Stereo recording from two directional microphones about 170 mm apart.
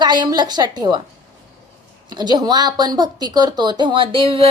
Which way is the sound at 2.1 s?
25° right (ahead or behind).